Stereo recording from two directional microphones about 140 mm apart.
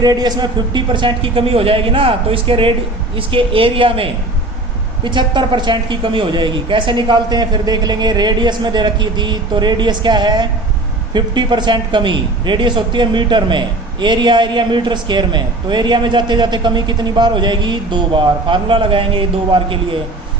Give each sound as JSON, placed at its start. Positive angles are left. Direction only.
{"t": 0.0, "sound": "a man's voice", "side_deg": -30}